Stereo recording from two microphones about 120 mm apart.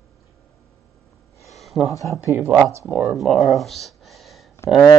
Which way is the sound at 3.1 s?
Centre (ahead or behind).